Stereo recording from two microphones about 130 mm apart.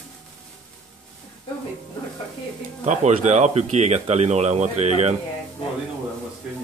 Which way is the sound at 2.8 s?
60° right (ahead or behind).